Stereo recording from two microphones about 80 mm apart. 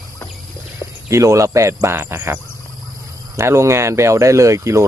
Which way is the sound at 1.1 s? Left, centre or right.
Right.